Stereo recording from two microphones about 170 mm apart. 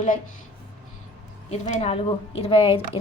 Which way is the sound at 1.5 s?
40° left (ahead or behind).